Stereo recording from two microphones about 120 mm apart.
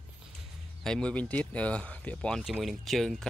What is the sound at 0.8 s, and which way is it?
Speech, 5° left (ahead or behind).